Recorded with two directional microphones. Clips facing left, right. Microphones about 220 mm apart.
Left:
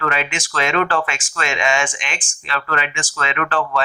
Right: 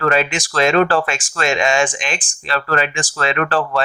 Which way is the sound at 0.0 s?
35° right (ahead or behind).